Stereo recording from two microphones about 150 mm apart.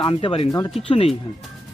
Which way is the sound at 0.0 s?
35° left (ahead or behind).